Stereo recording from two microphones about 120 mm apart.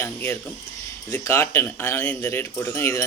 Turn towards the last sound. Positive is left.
turn(degrees=20)  # may be behind; listen again after turning